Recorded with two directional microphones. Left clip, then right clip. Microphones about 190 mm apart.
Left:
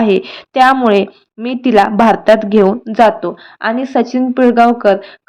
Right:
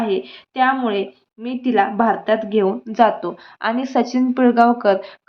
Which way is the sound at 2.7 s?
25° left (ahead or behind).